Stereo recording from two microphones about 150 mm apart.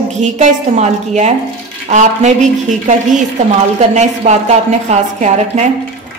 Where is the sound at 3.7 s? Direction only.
50° right (ahead or behind).